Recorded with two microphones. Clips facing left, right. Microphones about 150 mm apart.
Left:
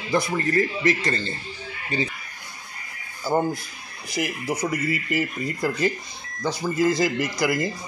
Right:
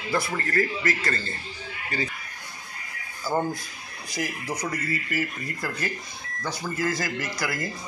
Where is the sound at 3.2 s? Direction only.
10° left (ahead or behind).